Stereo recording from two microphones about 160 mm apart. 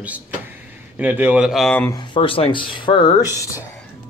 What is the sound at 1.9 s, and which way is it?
Speech, 30° left (ahead or behind).